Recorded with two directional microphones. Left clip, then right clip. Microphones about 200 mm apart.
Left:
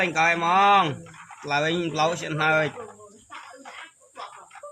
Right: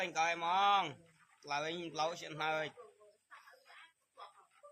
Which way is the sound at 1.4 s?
10° left (ahead or behind).